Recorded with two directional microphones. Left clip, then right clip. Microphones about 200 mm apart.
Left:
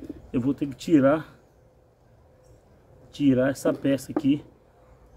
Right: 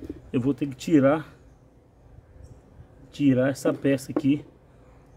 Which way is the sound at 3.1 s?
30° right (ahead or behind).